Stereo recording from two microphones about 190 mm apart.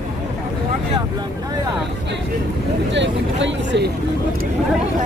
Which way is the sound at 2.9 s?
70° right (ahead or behind).